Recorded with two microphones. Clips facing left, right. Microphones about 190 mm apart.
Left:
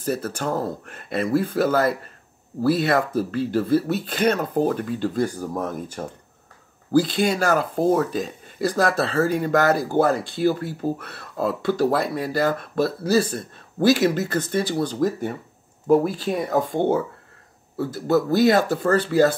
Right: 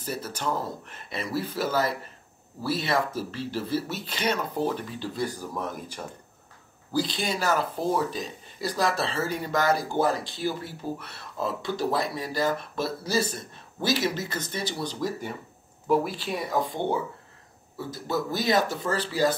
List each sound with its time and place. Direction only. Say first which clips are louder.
0.0 s speech: left 8 dB; 60° left (ahead or behind)
0.5 s speech: left 4 dB; 45° left (ahead or behind)
13.7 s speech: left 9 dB; 50° left (ahead or behind)